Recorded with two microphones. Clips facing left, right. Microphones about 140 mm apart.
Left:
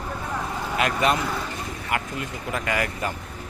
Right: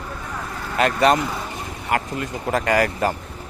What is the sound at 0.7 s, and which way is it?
Speech, 40° right (ahead or behind).